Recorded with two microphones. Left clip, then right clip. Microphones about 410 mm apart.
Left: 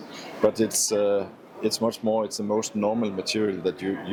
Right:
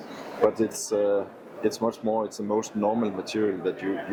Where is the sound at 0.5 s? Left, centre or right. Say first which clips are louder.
Left 2 dB; left.